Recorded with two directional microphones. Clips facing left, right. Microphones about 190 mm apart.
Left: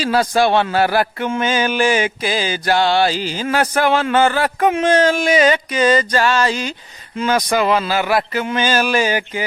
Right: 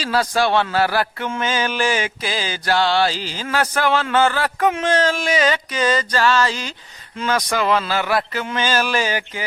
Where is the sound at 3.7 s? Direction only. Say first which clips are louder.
Left 2 dB; 15° left (ahead or behind).